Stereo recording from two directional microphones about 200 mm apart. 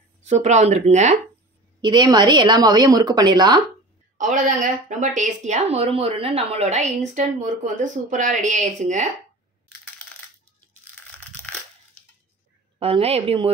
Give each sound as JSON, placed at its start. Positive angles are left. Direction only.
{"t": 0.2, "sound": "speech", "side_deg": -35}
{"t": 1.8, "sound": "a woman's voice", "side_deg": -20}
{"t": 4.2, "sound": "speech", "side_deg": -40}
{"t": 12.7, "sound": "a woman's voice", "side_deg": -25}